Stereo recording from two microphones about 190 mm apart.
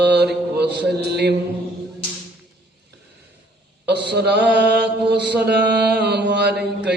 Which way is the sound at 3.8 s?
65° right (ahead or behind).